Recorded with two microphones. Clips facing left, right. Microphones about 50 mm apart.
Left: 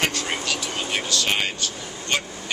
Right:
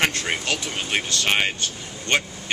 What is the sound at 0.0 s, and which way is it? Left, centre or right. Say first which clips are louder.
Speech: right 2 dB; right.